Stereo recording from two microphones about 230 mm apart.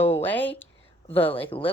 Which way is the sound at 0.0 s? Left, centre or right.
Centre.